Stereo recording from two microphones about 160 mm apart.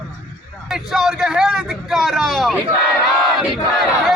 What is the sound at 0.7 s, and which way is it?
Vehicle, centre (ahead or behind).